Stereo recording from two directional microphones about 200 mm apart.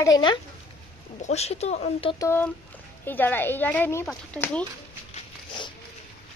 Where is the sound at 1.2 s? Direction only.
30° left (ahead or behind).